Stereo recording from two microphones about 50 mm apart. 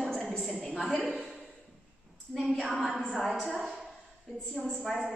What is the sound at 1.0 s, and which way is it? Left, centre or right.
Speech, centre.